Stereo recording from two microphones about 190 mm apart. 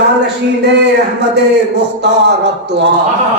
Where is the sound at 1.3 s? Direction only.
60° right (ahead or behind).